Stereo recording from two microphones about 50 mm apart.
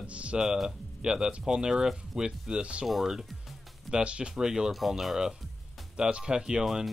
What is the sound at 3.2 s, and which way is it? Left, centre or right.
Music, centre.